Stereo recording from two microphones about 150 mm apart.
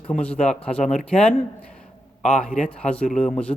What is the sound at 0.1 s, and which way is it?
A man's voice, 5° left (ahead or behind).